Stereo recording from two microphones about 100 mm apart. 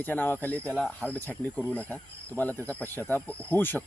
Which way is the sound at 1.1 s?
20° left (ahead or behind).